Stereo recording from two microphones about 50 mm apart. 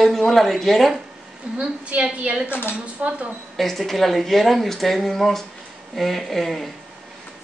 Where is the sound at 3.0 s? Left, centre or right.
Right.